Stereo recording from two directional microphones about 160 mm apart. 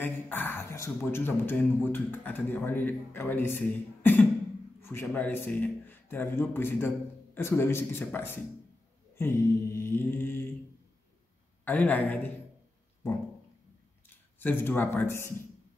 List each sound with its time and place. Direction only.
0.0 s speech: 10° left (ahead or behind)
11.6 s speech: 10° left (ahead or behind)
14.0 s speech: 10° left (ahead or behind)